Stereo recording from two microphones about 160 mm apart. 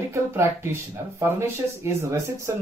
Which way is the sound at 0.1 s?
15° right (ahead or behind).